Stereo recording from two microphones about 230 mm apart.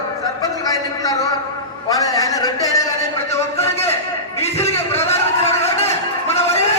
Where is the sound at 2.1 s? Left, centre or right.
Centre.